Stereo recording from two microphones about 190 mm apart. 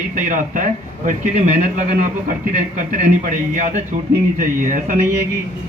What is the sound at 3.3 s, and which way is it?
A man's voice, 45° right (ahead or behind).